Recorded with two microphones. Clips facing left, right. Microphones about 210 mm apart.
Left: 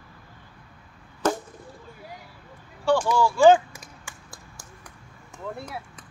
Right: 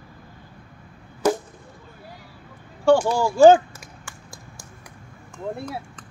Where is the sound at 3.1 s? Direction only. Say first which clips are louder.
Right 2 dB; 45° right (ahead or behind).